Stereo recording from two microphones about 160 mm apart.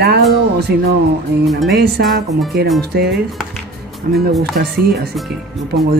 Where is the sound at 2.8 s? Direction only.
90° right.